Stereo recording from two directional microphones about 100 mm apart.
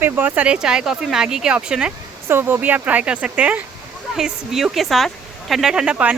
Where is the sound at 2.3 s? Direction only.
20° right (ahead or behind).